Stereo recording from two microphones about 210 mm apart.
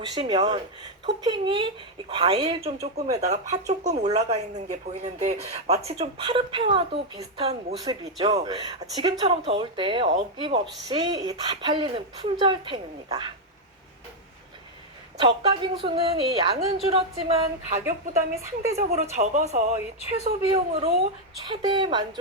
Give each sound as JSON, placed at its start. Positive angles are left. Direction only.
{"t": 0.0, "sound": "speech", "side_deg": -20}
{"t": 15.2, "sound": "speech", "side_deg": -20}
{"t": 19.1, "sound": "speech", "side_deg": -35}